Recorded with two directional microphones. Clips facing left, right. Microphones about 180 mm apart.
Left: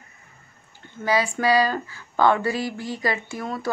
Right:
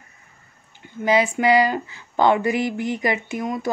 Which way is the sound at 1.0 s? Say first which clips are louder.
Right 3 dB; 20° right (ahead or behind).